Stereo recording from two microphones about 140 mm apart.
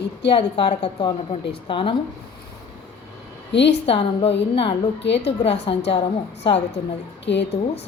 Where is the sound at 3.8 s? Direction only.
45° left (ahead or behind).